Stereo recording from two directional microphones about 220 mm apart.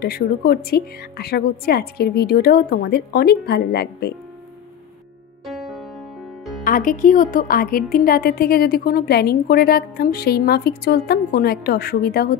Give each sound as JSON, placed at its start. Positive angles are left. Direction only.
{"t": 0.0, "sound": "a woman's voice", "side_deg": 45}
{"t": 5.5, "sound": "music", "side_deg": 0}
{"t": 6.6, "sound": "a woman's voice", "side_deg": 40}